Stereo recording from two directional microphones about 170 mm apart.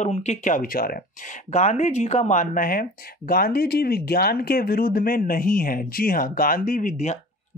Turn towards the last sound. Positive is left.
turn(degrees=45)  # may be behind; listen again after turning